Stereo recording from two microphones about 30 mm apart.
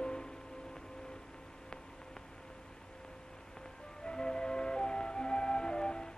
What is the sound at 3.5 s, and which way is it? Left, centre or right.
Music, left.